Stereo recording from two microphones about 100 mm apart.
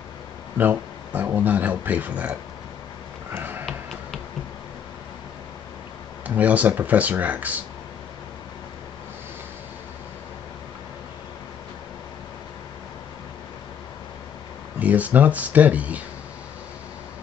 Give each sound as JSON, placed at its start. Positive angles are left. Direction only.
{"t": 0.6, "sound": "speech", "side_deg": -20}
{"t": 3.3, "sound": "a sound", "side_deg": -20}
{"t": 6.2, "sound": "speech", "side_deg": -15}
{"t": 14.8, "sound": "speech", "side_deg": -15}